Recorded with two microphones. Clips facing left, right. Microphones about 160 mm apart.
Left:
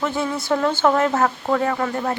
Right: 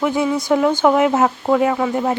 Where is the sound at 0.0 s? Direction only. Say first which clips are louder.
Right 5 dB; 15° right (ahead or behind).